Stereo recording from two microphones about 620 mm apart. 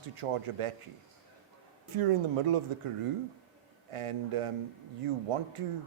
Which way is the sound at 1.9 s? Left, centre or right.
Right.